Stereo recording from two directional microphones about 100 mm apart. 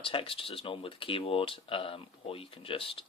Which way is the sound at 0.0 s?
60° left (ahead or behind).